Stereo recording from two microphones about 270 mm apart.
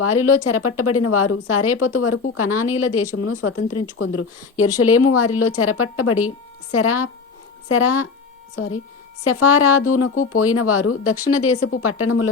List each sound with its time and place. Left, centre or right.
0.0 s a woman's voice: left